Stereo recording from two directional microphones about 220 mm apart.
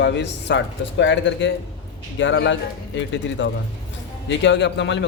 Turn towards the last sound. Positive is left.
turn(degrees=55)  # may be behind; listen again after turning